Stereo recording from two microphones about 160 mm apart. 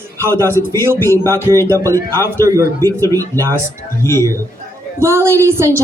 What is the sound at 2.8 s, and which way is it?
Speech, 20° left (ahead or behind).